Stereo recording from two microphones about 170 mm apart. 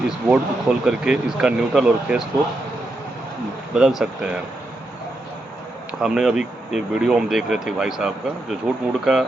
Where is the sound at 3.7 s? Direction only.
5° right (ahead or behind).